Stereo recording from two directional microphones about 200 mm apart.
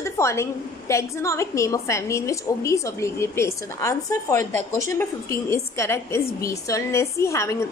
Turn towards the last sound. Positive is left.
turn(degrees=15)  # may be behind; listen again after turning